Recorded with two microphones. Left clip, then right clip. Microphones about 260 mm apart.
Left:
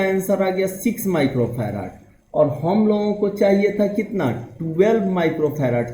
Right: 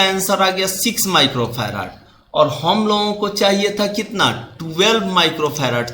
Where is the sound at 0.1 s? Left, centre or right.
Right.